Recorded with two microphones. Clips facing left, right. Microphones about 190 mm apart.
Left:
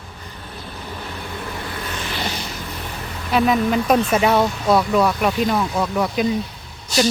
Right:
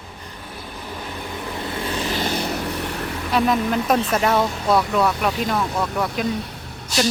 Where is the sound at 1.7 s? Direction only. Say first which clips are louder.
Right 4 dB; 30° right (ahead or behind); by 2.6 s 55° right (ahead or behind).